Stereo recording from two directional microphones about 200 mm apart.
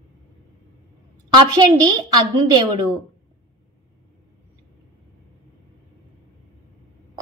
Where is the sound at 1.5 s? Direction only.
20° right (ahead or behind).